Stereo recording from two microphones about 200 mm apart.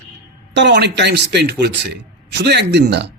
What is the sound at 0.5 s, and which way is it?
A man's voice, 60° right (ahead or behind).